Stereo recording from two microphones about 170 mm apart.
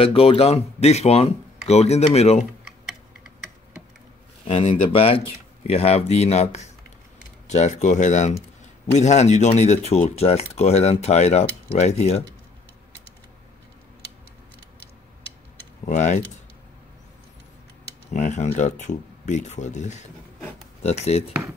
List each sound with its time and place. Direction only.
0.0 s speech: 35° left (ahead or behind)
4.5 s speech: 35° left (ahead or behind)
15.8 s speech: 45° left (ahead or behind)
18.1 s speech: 45° left (ahead or behind)